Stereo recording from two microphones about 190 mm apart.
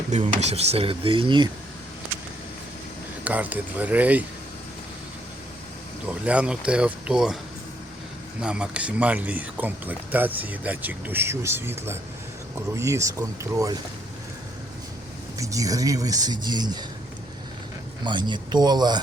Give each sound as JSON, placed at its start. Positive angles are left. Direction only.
{"t": 0.1, "sound": "speech", "side_deg": -35}
{"t": 3.2, "sound": "speech", "side_deg": -10}
{"t": 6.1, "sound": "speech", "side_deg": -5}
{"t": 8.4, "sound": "speech", "side_deg": -5}
{"t": 15.4, "sound": "speech", "side_deg": -20}
{"t": 18.0, "sound": "speech", "side_deg": -25}